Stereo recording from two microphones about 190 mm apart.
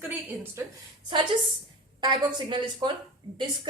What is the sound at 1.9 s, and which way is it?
Speech, 25° right (ahead or behind).